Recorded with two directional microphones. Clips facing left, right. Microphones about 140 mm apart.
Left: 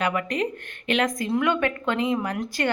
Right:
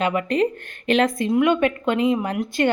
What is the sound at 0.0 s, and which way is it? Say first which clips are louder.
Speech: right 5 dB; 25° right (ahead or behind).